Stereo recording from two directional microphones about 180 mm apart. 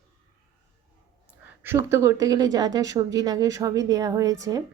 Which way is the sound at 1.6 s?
15° right (ahead or behind).